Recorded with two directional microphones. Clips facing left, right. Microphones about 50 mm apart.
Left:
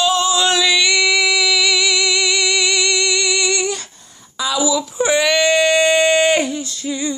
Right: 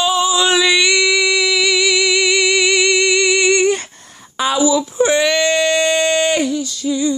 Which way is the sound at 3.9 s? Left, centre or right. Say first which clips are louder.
Right 4 dB; right.